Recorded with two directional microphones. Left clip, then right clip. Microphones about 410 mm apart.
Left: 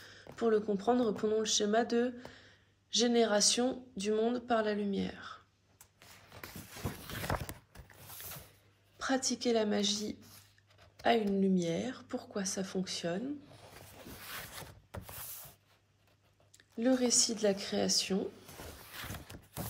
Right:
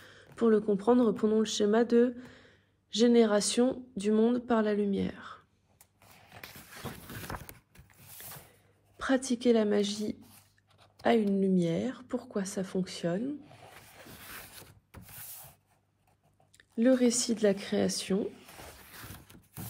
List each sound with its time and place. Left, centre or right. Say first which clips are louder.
0.0 s speech: right 4 dB; centre
7.3 s horse: left 5 dB; left
8.9 s speech: right 4 dB; centre
16.5 s speech: right 5 dB; centre